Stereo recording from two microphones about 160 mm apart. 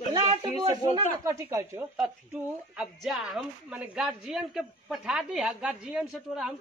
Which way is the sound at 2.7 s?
Centre (ahead or behind).